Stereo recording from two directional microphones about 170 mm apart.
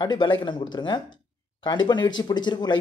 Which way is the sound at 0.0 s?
25° left (ahead or behind).